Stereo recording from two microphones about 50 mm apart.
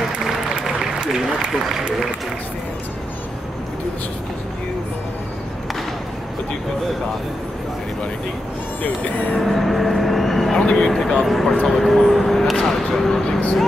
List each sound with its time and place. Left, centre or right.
0.6 s applause: centre
8.8 s speech: left
9.4 s speech: centre